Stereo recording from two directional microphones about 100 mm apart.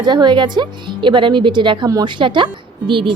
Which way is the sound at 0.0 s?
50° right (ahead or behind).